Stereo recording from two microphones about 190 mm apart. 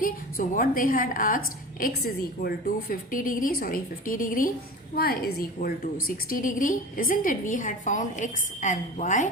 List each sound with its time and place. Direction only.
0.0 s a woman's voice: 45° left (ahead or behind)
2.9 s a woman's voice: 45° left (ahead or behind)